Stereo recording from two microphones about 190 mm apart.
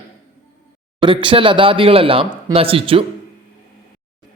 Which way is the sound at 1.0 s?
25° right (ahead or behind).